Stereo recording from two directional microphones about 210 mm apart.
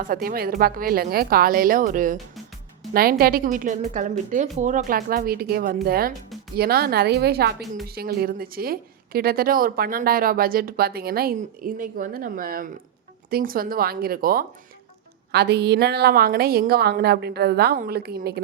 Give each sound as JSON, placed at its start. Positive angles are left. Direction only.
{"t": 0.0, "sound": "a woman's voice", "side_deg": -40}